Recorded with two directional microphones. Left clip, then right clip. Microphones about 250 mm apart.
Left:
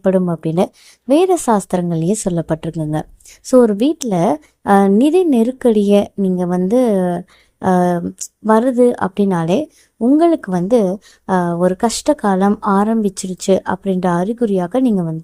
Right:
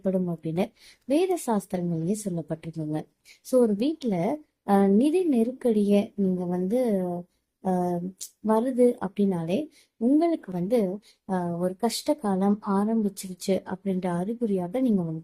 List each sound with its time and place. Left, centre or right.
0.0 s a woman's voice: left